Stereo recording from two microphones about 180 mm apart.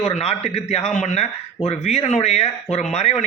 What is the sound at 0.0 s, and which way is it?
A man's voice, 35° left (ahead or behind).